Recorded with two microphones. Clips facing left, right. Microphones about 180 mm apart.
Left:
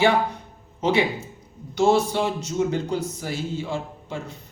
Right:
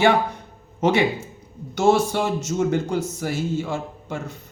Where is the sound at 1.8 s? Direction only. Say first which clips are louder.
Right 1 dB; 50° right (ahead or behind).